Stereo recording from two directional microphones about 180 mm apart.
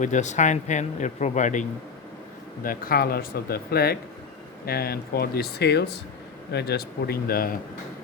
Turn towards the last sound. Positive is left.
turn(degrees=55)  # may be behind; listen again after turning